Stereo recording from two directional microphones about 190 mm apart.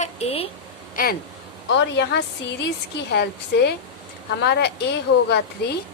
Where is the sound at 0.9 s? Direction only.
50° left (ahead or behind).